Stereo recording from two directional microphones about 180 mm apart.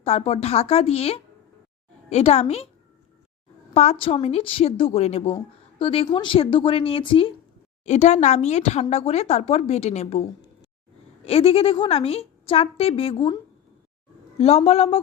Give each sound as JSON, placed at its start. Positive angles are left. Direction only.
{"t": 0.0, "sound": "speech", "side_deg": 35}
{"t": 3.8, "sound": "speech", "side_deg": 35}
{"t": 7.9, "sound": "speech", "side_deg": 40}